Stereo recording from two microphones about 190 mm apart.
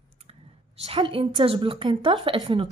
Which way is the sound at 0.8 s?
25° right (ahead or behind).